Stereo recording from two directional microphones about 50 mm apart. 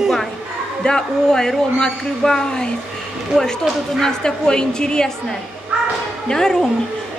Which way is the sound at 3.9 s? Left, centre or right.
Centre.